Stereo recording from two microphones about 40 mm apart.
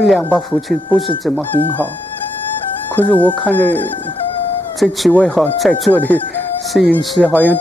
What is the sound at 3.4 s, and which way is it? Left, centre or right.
Speech, left.